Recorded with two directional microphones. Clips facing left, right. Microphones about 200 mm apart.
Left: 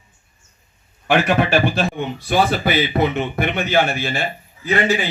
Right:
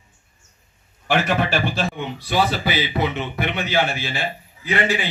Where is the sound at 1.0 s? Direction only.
60° left (ahead or behind).